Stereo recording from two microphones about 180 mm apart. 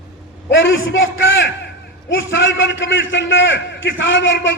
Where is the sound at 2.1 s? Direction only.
90° left.